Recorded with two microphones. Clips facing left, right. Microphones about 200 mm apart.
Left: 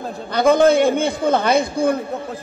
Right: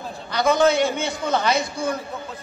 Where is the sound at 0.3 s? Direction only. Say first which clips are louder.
Left 5 dB; 55° left (ahead or behind).